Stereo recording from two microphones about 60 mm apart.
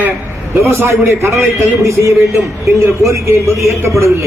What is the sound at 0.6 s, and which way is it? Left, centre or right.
A man's voice, right.